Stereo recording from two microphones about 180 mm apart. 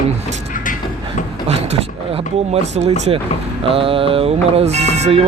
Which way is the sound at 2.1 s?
35° right (ahead or behind).